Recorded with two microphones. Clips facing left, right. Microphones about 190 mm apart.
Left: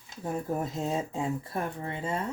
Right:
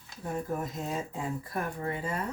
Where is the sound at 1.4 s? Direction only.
25° left (ahead or behind).